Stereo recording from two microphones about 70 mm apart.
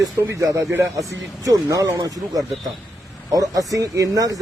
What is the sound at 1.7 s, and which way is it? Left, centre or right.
Speech, right.